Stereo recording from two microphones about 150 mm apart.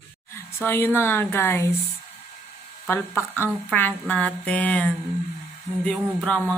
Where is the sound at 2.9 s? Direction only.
15° left (ahead or behind).